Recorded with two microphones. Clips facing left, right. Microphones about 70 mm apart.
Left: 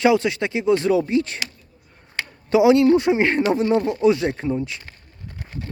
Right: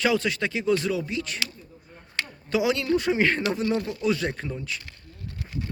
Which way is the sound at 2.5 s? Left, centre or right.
Left.